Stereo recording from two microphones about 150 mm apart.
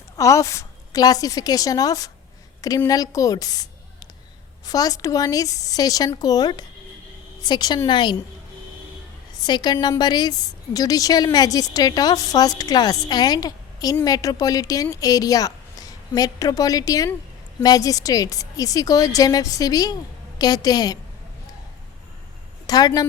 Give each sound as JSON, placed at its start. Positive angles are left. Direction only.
{"t": 0.2, "sound": "a woman's voice", "side_deg": 20}
{"t": 9.4, "sound": "a woman's voice", "side_deg": 30}
{"t": 22.6, "sound": "a sound", "side_deg": 25}